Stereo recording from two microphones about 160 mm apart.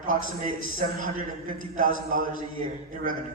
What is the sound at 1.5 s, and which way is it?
A man's voice, 55° right (ahead or behind).